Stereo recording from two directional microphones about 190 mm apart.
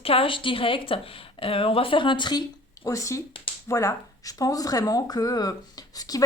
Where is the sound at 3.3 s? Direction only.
25° left (ahead or behind).